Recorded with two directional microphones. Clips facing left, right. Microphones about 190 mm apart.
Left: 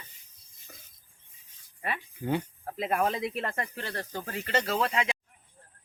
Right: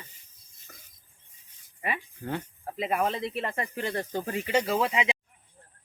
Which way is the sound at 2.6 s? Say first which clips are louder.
Right 4 dB; 5° right (ahead or behind).